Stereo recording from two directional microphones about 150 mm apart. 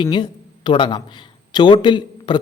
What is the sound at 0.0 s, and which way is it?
Speech, 30° left (ahead or behind).